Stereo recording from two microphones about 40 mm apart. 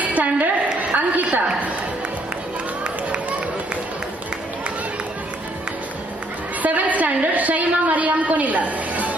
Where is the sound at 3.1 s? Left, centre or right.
Right.